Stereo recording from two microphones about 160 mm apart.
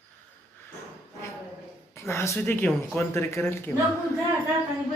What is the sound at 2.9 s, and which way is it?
Speech, 15° left (ahead or behind).